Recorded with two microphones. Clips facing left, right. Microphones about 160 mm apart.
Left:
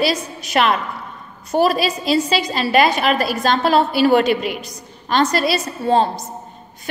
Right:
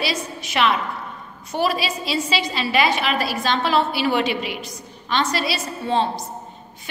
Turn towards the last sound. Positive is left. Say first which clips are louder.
# left 5 dB
turn(degrees=45)  # may be behind; listen again after turning